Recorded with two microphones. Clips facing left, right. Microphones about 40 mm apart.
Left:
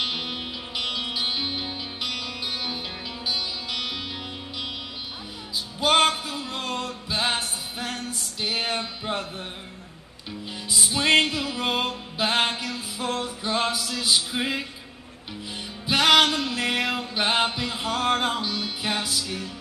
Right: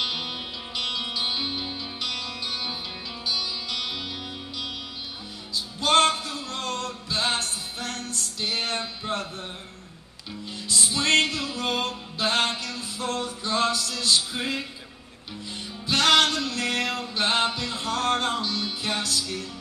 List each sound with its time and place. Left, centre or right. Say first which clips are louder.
0.0 s music: left 1 dB; centre
5.5 s music: left 1 dB; centre
10.4 s music: even; centre